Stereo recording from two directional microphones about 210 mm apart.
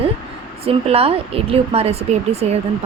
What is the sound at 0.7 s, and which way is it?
Speech, 30° right (ahead or behind).